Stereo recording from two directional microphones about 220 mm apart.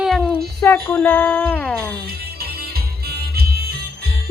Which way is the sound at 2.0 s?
45° right (ahead or behind).